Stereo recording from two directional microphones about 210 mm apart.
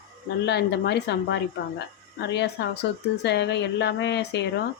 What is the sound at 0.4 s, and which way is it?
Speech, 55° left (ahead or behind).